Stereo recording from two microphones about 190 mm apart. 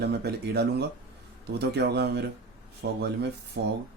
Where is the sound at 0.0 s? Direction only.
60° right (ahead or behind).